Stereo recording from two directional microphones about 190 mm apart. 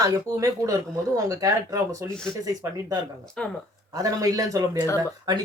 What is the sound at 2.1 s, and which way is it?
Speech, 5° left (ahead or behind).